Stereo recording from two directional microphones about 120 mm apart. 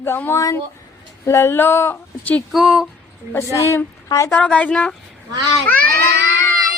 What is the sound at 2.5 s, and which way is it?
Speech, centre (ahead or behind).